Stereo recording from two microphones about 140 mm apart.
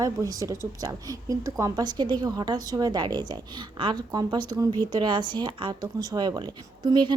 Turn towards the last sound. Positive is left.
turn(degrees=-30)  # may be behind; listen again after turning